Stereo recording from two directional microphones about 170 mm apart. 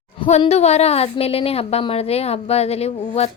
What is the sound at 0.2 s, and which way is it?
Speech, 40° left (ahead or behind).